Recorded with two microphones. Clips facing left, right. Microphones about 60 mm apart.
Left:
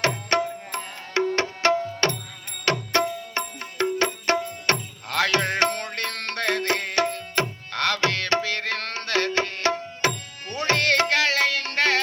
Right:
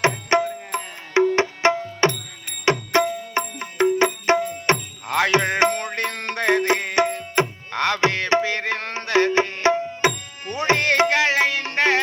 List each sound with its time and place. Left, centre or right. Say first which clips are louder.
0.0 s music: right 4 dB; centre